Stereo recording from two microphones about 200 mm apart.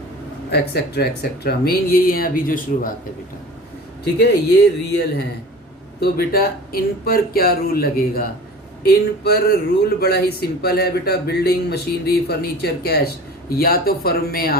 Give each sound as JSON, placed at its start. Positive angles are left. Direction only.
{"t": 0.5, "sound": "speech", "side_deg": 55}
{"t": 4.0, "sound": "speech", "side_deg": 55}
{"t": 6.0, "sound": "speech", "side_deg": 50}